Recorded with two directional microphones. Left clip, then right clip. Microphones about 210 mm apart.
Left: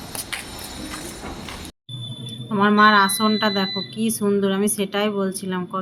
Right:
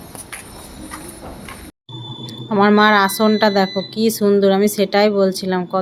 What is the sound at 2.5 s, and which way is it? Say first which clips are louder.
A woman's voice: right 2 dB; 10° right (ahead or behind).